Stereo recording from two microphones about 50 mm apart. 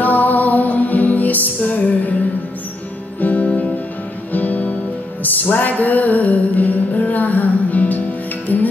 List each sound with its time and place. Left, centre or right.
0.0 s music: left
3.2 s music: left